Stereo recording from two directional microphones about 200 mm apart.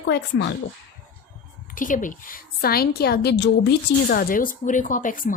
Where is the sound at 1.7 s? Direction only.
40° left (ahead or behind).